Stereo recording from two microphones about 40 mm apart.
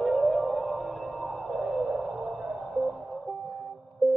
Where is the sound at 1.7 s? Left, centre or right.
Centre.